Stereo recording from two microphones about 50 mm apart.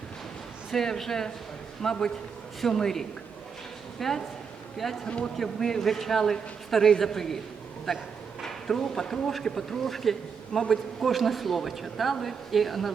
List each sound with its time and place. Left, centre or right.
0.7 s a man's voice: centre
5.0 s speech: centre
5.4 s a man's voice: centre
8.4 s speech: centre